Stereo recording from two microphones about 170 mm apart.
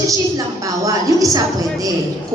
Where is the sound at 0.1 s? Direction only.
20° right (ahead or behind).